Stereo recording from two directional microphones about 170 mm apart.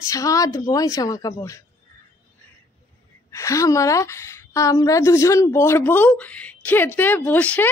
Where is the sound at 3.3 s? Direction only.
20° left (ahead or behind).